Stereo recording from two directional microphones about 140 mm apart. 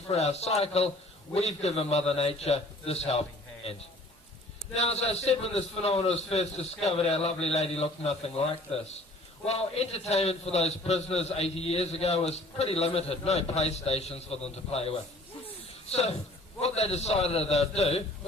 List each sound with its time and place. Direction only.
0.1 s a man's voice: 50° left (ahead or behind)